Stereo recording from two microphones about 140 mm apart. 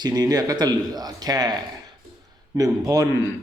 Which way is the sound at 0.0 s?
30° right (ahead or behind).